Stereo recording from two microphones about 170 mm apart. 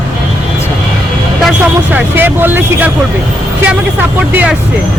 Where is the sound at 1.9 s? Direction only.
10° right (ahead or behind).